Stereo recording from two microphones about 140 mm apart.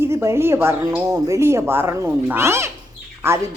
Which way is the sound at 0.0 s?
20° right (ahead or behind).